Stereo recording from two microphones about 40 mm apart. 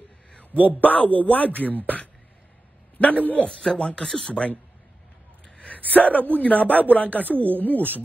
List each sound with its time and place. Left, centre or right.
0.7 s speech: left
3.0 s speech: left
3.4 s speech: centre
5.9 s speech: left
7.3 s speech: right
7.6 s speech: left